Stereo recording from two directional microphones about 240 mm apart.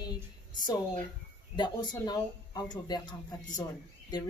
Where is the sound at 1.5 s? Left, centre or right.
Centre.